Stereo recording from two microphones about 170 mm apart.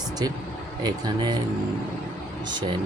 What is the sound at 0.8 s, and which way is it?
Speech, 25° right (ahead or behind).